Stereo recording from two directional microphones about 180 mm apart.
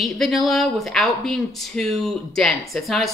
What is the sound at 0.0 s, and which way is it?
Speech, centre (ahead or behind).